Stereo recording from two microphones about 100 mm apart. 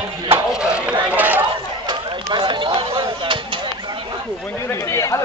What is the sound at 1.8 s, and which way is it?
Run, 50° right (ahead or behind).